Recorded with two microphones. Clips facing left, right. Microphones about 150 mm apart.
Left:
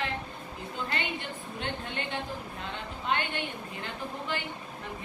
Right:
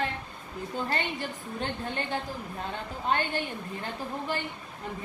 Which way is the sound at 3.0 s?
40° right (ahead or behind).